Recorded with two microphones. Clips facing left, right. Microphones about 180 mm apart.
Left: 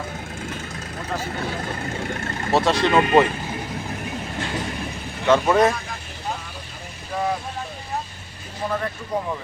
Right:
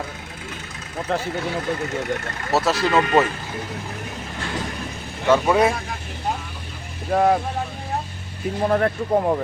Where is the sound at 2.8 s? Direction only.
20° left (ahead or behind).